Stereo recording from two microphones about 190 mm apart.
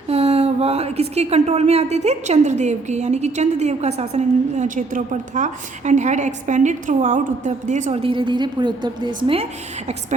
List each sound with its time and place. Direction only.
0.1 s speech: 30° right (ahead or behind)